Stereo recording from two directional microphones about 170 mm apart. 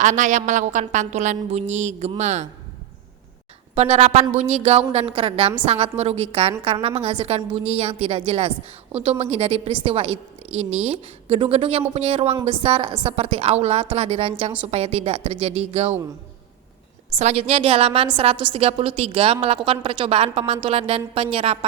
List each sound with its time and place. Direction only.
0.0 s music: 45° right (ahead or behind)
3.8 s a woman's voice: 40° right (ahead or behind)
17.2 s a woman's voice: 40° right (ahead or behind)